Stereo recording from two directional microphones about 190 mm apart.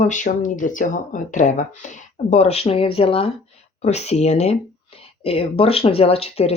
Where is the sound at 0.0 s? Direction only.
40° left (ahead or behind).